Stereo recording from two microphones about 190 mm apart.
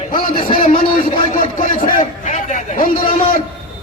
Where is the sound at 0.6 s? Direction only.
30° left (ahead or behind).